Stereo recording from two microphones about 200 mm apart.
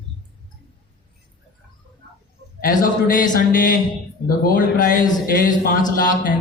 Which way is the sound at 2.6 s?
40° left (ahead or behind).